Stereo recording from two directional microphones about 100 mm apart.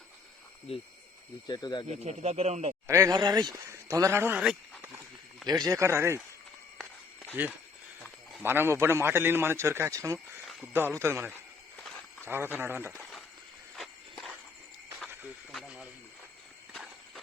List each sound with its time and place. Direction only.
1.5 s speech: 45° left (ahead or behind)
1.9 s speech: 90° right
2.8 s speech: 35° right (ahead or behind)
3.2 s speech: 45° right (ahead or behind)
3.7 s speech: 30° right (ahead or behind)
5.5 s a man's voice: 40° right (ahead or behind)
7.4 s a man's voice: 20° right (ahead or behind)
10.7 s a man's voice: 20° right (ahead or behind)
11.8 s a sound: centre (ahead or behind)
12.3 s a man's voice: 20° right (ahead or behind)
12.9 s a sound: 5° left (ahead or behind)
13.7 s walk: centre (ahead or behind)
15.6 s a sound: 10° right (ahead or behind)